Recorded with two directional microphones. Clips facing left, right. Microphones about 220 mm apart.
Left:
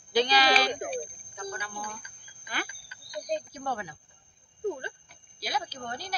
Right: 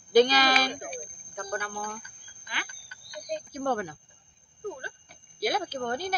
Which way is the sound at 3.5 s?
50° right (ahead or behind).